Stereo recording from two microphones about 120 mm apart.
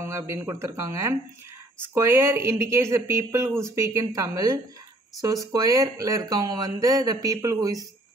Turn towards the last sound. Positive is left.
turn(degrees=-30)  # may be behind; listen again after turning